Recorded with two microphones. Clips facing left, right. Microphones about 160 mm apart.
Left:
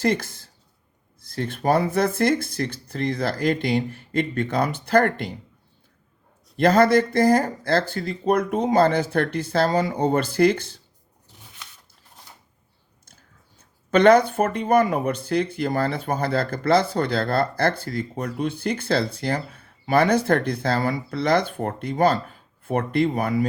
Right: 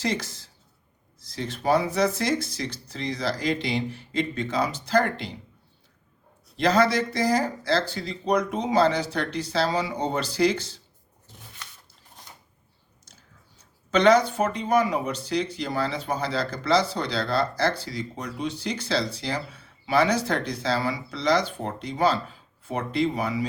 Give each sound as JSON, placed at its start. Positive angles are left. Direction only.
{"t": 0.0, "sound": "speech", "side_deg": 55}
{"t": 6.6, "sound": "speech", "side_deg": 50}
{"t": 13.6, "sound": "speech", "side_deg": 55}